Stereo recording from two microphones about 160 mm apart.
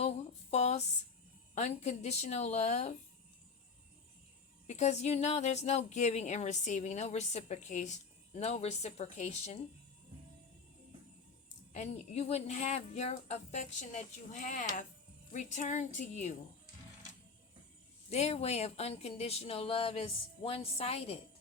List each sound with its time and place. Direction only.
0.5 s a sound: 45° left (ahead or behind)
1.5 s speech: 45° left (ahead or behind)
4.6 s speech: 45° left (ahead or behind)
11.7 s speech: 45° left (ahead or behind)
18.1 s speech: 40° left (ahead or behind)